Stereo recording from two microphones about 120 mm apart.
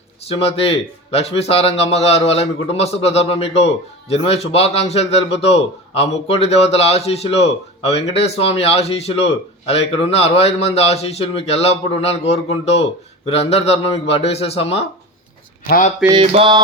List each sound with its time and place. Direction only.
0.3 s a man's voice: 55° left (ahead or behind)
16.1 s mantra: 55° right (ahead or behind)